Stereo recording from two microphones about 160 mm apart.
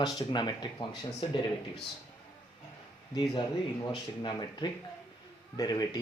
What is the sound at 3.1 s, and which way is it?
Speech, 25° left (ahead or behind).